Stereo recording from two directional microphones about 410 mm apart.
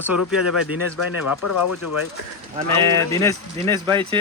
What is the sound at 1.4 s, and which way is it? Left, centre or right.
Speech, left.